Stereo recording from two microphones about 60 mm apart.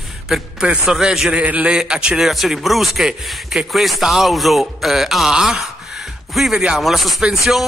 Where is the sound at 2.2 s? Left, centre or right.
Centre.